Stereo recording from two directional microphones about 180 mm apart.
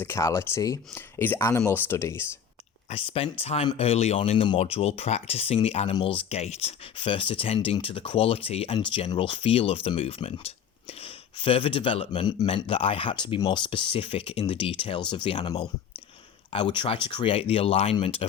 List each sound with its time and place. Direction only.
0.0 s speech: 15° left (ahead or behind)
2.9 s speech: 30° left (ahead or behind)